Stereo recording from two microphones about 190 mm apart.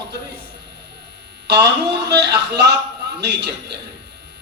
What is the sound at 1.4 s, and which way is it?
A man's voice, 65° right (ahead or behind).